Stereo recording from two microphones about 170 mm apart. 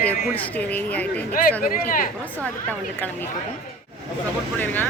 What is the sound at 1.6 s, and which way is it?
Speech, 55° left (ahead or behind).